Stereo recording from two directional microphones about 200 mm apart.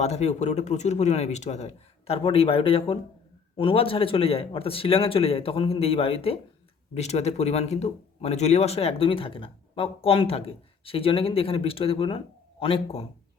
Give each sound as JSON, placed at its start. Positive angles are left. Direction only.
{"t": 0.0, "sound": "speech", "side_deg": 35}